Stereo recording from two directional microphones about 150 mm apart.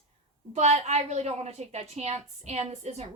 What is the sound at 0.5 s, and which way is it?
A woman's voice, 45° right (ahead or behind).